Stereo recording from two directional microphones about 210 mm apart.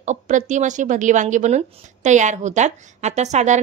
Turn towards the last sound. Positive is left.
turn(degrees=-35)  # may be behind; listen again after turning